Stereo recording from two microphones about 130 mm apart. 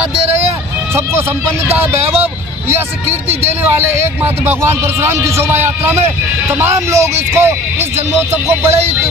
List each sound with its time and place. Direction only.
4.2 s a man's voice: 15° right (ahead or behind)